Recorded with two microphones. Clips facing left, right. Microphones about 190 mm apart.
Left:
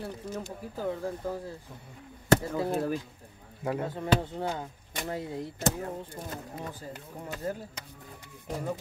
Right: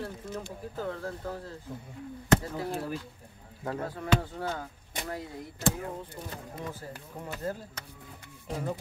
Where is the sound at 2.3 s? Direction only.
35° left (ahead or behind).